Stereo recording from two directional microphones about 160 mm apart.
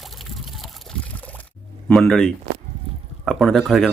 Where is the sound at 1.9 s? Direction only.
5° left (ahead or behind).